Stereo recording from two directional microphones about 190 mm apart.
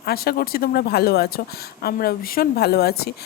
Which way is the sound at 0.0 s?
55° left (ahead or behind).